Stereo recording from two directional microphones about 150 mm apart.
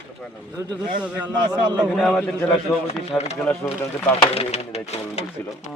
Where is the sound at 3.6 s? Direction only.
15° left (ahead or behind).